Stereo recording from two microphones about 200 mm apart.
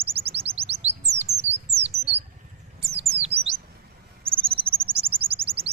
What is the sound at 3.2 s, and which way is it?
Chirp, 30° right (ahead or behind).